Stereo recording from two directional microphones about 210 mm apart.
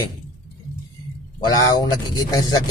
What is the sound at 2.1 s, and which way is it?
Speech, 15° left (ahead or behind).